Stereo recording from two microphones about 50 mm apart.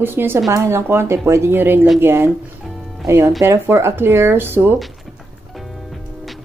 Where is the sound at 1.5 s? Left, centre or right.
Right.